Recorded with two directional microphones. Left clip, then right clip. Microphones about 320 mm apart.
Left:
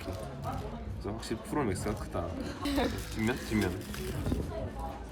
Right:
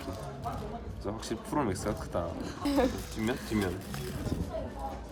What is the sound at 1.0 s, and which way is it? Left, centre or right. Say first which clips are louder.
A woman's voice: right 1 dB; centre.